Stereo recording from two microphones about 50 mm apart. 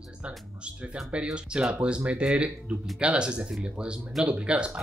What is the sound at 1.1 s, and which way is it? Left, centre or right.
Speech, right.